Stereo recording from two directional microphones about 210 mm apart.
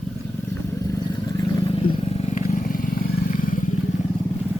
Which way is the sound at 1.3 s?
20° left (ahead or behind).